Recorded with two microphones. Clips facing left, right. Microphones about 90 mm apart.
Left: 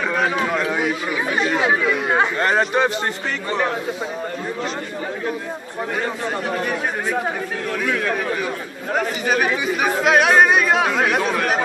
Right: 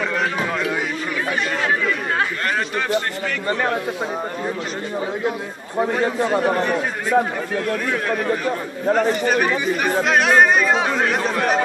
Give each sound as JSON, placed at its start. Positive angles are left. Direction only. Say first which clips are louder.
{"t": 0.1, "sound": "a sound", "louder": "left 2 dB", "side_deg": 5}
{"t": 1.4, "sound": "speech", "louder": "left 4 dB", "side_deg": 10}
{"t": 2.4, "sound": "a man's voice", "louder": "left 5 dB", "side_deg": 20}
{"t": 6.6, "sound": "speech", "louder": "right 1 dB", "side_deg": 5}
{"t": 8.9, "sound": "speech", "louder": "right 1 dB", "side_deg": 5}